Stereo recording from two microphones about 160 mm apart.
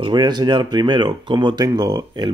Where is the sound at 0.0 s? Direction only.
25° right (ahead or behind).